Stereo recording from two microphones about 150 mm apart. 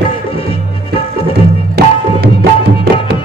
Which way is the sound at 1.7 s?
90° right.